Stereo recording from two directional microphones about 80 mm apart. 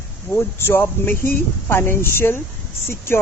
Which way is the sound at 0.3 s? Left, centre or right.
Left.